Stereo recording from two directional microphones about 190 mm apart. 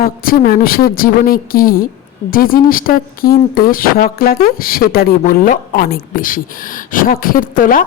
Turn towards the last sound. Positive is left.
turn(degrees=45)  # may be behind; listen again after turning